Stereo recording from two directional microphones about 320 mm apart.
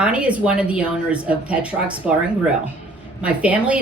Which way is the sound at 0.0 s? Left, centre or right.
Centre.